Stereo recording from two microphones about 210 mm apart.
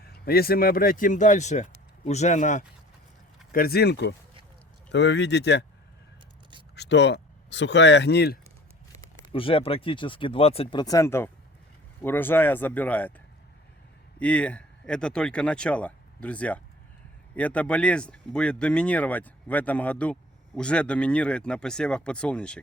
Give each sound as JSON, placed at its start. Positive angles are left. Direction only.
{"t": 0.0, "sound": "speech", "side_deg": 45}
{"t": 3.5, "sound": "speech", "side_deg": 45}
{"t": 6.7, "sound": "speech", "side_deg": 55}
{"t": 9.3, "sound": "speech", "side_deg": 25}